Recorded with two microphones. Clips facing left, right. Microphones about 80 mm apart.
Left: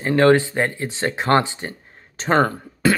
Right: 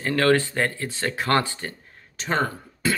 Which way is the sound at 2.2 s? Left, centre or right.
Left.